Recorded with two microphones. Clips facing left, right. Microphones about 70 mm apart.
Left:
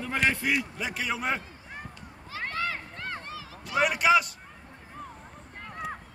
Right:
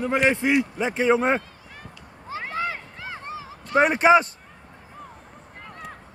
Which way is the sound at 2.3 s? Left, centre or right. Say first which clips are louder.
Right 4 dB; right.